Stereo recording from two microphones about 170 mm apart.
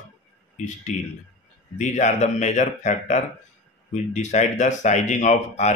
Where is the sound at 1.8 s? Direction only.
45° left (ahead or behind).